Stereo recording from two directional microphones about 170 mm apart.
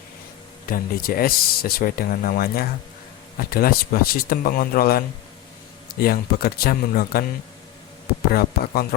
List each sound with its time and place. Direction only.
0.7 s speech: 60° left (ahead or behind)
8.3 s speech: 60° left (ahead or behind)